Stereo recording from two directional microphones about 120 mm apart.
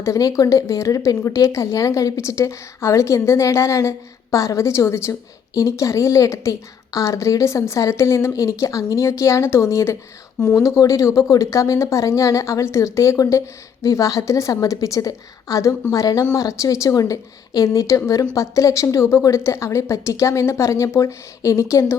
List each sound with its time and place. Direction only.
0.0 s speech: 25° left (ahead or behind)